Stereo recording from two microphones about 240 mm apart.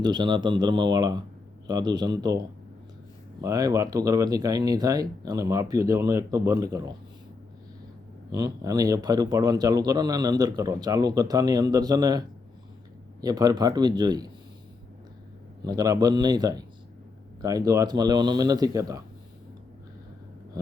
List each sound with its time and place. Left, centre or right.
0.0 s speech: centre
3.4 s speech: centre
8.3 s speech: centre
13.2 s speech: centre
15.6 s speech: centre